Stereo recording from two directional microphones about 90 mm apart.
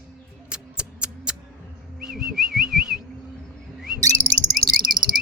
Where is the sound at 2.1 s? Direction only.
5° right (ahead or behind).